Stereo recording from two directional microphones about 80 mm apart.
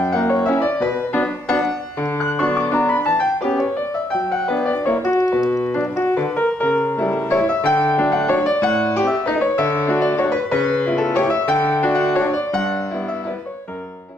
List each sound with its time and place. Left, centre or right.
0.0 s music: centre
5.5 s piano: left
6.4 s music: centre
8.5 s music: left